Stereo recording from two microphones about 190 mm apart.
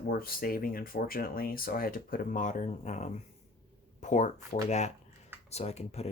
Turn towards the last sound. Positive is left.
turn(degrees=35)  # may be behind; listen again after turning